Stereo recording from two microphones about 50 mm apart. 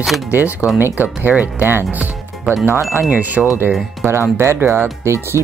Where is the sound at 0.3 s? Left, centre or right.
Right.